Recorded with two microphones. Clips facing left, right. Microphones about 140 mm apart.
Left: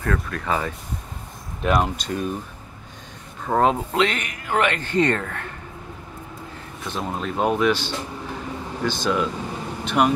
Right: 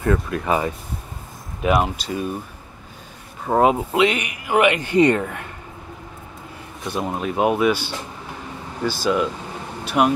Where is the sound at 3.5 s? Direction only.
10° right (ahead or behind).